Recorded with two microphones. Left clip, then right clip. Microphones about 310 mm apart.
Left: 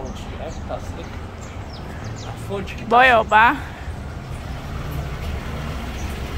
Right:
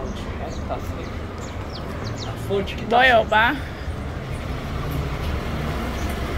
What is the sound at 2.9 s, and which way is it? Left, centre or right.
Speech, centre.